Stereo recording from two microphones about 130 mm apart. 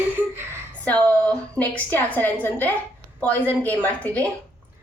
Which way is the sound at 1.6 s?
15° left (ahead or behind).